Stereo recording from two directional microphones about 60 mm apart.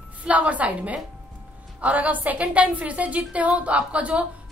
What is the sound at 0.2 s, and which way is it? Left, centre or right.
A woman's voice, right.